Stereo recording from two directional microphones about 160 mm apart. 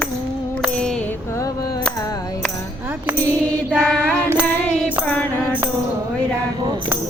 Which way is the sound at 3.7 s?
10° right (ahead or behind).